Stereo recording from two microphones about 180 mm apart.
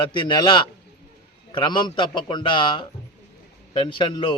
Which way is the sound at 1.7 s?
25° left (ahead or behind).